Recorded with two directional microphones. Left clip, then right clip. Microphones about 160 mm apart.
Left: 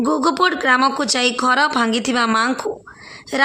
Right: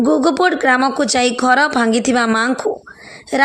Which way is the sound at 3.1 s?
25° right (ahead or behind).